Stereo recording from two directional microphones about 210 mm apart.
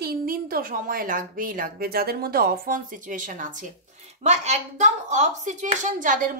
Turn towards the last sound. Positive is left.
turn(degrees=-40)  # may be behind; listen again after turning